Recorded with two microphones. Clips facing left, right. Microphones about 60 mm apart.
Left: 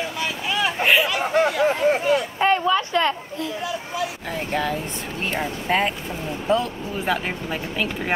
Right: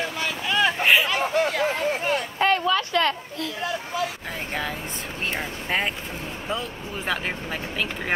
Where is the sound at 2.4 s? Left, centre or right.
Left.